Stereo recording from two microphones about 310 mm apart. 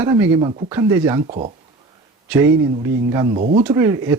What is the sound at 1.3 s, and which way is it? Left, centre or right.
Speech, right.